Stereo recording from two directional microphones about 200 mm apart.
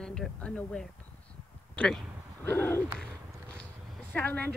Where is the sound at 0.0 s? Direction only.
5° left (ahead or behind).